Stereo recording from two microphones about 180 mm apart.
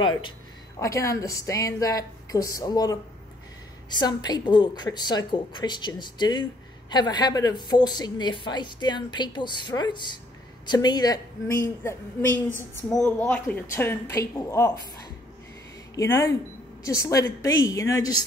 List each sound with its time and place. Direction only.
0.0 s a woman's voice: 25° left (ahead or behind)
4.0 s a woman's voice: 25° left (ahead or behind)
15.9 s a woman's voice: 15° left (ahead or behind)